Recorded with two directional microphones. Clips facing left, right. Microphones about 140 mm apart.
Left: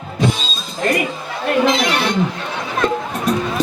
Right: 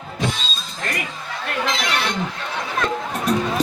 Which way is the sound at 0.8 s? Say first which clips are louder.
Left 10 dB; 15° left (ahead or behind).